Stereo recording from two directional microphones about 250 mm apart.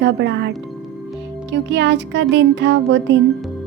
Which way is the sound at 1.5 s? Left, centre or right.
Right.